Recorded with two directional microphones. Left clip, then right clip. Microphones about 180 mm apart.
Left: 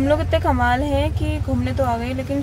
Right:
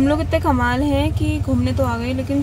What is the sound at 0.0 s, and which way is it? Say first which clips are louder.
Speech: even; 15° right (ahead or behind).